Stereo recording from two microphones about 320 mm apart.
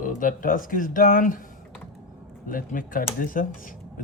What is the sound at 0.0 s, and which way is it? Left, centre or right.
Speech, left.